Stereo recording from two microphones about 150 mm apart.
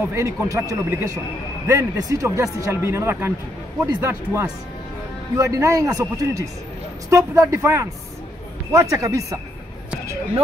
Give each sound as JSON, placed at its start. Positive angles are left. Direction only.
{"t": 0.0, "sound": "a man's voice", "side_deg": -20}